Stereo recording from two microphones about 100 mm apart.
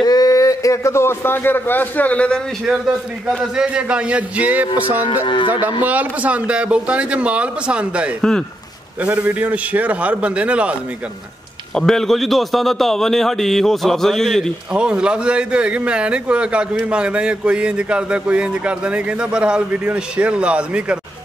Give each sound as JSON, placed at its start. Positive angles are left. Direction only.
{"t": 0.0, "sound": "a man's voice", "side_deg": 40}
{"t": 2.6, "sound": "a man's voice", "side_deg": -5}
{"t": 5.2, "sound": "speech", "side_deg": 55}
{"t": 5.5, "sound": "a man's voice", "side_deg": -15}
{"t": 8.2, "sound": "speech", "side_deg": 5}
{"t": 9.0, "sound": "a man's voice", "side_deg": -15}
{"t": 11.7, "sound": "a man's voice", "side_deg": 5}
{"t": 14.7, "sound": "a man's voice", "side_deg": -10}